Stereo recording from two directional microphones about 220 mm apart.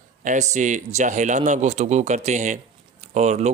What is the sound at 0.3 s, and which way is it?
Speech, 35° right (ahead or behind).